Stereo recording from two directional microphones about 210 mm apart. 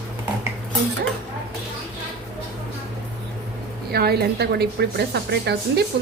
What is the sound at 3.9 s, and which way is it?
A woman's voice, 50° right (ahead or behind).